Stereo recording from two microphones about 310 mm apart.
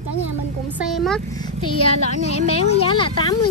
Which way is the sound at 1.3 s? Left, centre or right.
Centre.